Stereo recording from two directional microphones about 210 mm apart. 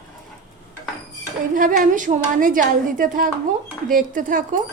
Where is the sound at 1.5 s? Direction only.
40° right (ahead or behind).